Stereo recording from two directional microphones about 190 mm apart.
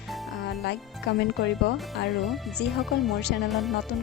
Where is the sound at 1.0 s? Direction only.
60° left (ahead or behind).